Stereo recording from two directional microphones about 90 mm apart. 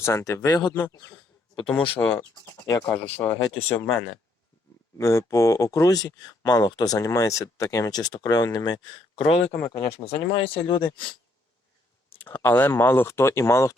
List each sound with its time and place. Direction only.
0.0 s speech: 30° left (ahead or behind)
2.0 s speech: 25° left (ahead or behind)
2.6 s speech: 40° left (ahead or behind)
2.9 s speech: 20° left (ahead or behind); by 8.8 s 50° left (ahead or behind)
9.1 s speech: 90° left
9.6 s speech: 30° left (ahead or behind)
10.6 s speech: 55° left (ahead or behind)
12.1 s speech: 20° left (ahead or behind)